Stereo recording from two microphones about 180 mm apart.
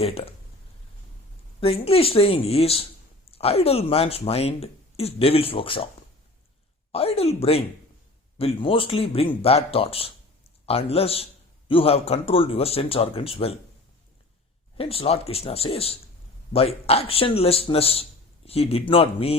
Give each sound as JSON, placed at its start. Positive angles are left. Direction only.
{"t": 0.0, "sound": "speech", "side_deg": 30}
{"t": 1.6, "sound": "speech", "side_deg": 35}
{"t": 6.9, "sound": "speech", "side_deg": 35}
{"t": 14.8, "sound": "speech", "side_deg": 30}